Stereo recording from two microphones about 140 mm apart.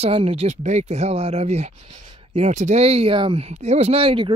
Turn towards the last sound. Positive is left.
turn(degrees=-40)  # may be behind; listen again after turning